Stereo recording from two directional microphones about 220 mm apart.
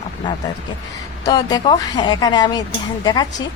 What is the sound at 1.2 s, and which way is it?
A woman's voice, 15° left (ahead or behind).